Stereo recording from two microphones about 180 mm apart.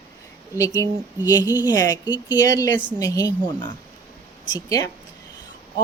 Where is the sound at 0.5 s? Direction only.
15° left (ahead or behind).